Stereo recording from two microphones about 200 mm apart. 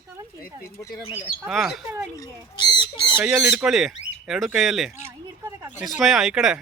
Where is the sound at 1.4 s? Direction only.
Centre (ahead or behind).